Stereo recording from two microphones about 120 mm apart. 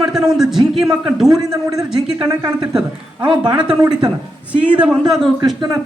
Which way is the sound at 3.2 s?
10° right (ahead or behind).